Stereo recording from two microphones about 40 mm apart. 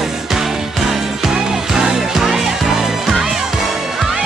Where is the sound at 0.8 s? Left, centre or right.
Centre.